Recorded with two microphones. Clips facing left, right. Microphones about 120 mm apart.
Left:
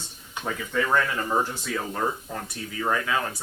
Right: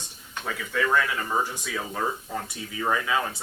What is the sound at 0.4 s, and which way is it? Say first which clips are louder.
Speech: left 1 dB; 5° left (ahead or behind).